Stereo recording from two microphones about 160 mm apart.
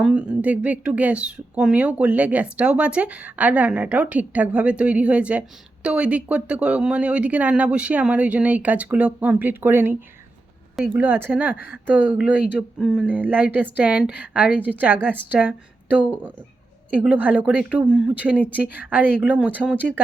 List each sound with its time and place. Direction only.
0.0 s speech: 5° right (ahead or behind)
11.5 s speech: 75° left (ahead or behind)
11.9 s speech: 10° right (ahead or behind)